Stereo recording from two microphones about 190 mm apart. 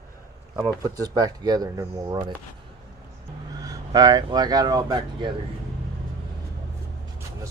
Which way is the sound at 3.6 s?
20° right (ahead or behind).